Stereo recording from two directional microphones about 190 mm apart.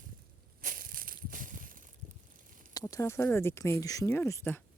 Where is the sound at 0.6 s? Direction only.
50° right (ahead or behind).